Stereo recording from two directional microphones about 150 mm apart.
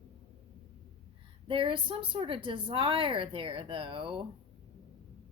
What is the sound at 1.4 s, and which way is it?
Speech, 35° right (ahead or behind).